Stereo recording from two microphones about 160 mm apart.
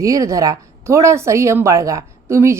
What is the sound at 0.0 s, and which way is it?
Speech, 20° right (ahead or behind).